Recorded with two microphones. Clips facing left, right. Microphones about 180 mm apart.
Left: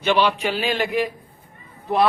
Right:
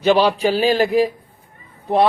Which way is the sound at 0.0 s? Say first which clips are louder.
Right 5 dB; 35° right (ahead or behind).